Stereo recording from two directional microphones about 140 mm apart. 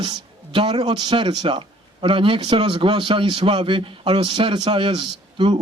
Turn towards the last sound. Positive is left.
turn(degrees=-35)  # may be behind; listen again after turning